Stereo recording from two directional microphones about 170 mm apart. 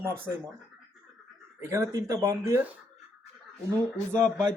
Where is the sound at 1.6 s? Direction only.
15° right (ahead or behind).